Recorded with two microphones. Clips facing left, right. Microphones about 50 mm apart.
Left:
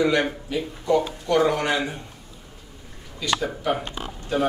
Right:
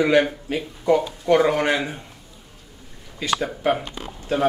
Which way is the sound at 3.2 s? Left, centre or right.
Right.